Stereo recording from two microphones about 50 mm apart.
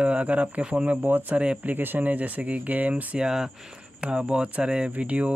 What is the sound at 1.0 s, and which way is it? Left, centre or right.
Speech, right.